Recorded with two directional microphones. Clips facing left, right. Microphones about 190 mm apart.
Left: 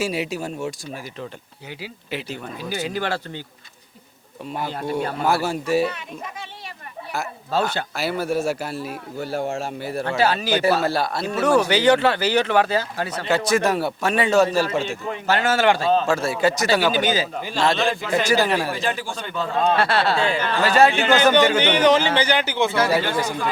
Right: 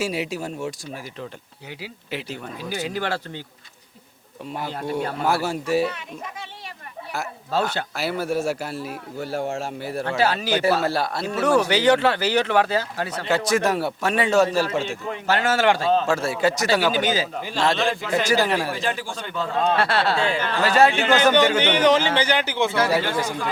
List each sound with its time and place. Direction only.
0.0 s a man's voice: 10° left (ahead or behind)
2.7 s a man's voice: 15° left (ahead or behind)
4.6 s speech: 20° left (ahead or behind)
7.1 s a man's voice: 20° left (ahead or behind)
10.0 s a man's voice: 15° left (ahead or behind)